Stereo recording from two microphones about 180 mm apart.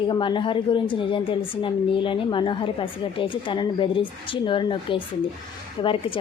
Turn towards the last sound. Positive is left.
turn(degrees=30)  # may be behind; listen again after turning